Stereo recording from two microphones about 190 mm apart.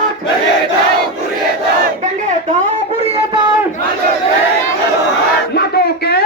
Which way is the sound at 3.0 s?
30° right (ahead or behind).